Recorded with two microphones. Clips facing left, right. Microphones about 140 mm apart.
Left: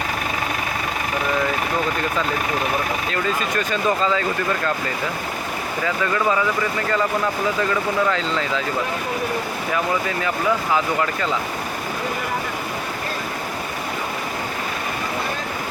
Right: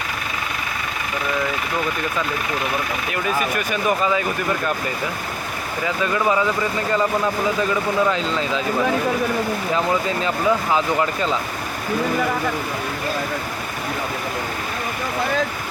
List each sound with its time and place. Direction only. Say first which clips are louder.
3.1 s speech: right 4 dB; 15° right (ahead or behind)
5.8 s speech: right 1 dB; 20° right (ahead or behind)
9.7 s speech: right 1 dB; 20° right (ahead or behind)